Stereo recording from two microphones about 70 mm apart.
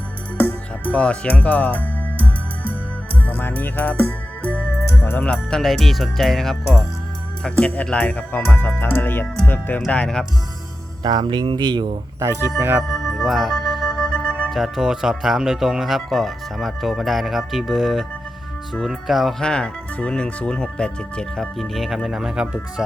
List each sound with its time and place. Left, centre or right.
0.3 s music: left
0.9 s speech: centre
3.2 s speech: left
4.9 s music: left
5.5 s speech: centre
7.4 s speech: centre
9.9 s speech: centre
11.0 s speech: right
12.2 s speech: right
12.9 s organ: centre
14.5 s speech: centre
19.4 s speech: centre